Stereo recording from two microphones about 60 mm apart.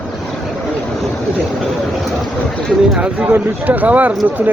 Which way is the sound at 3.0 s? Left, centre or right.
Right.